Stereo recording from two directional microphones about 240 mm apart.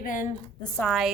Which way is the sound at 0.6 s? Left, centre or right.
Centre.